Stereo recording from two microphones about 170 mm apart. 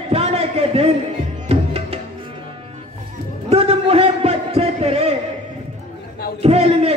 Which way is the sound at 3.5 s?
35° right (ahead or behind).